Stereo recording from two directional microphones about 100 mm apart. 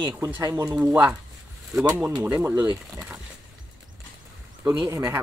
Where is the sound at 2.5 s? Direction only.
40° right (ahead or behind).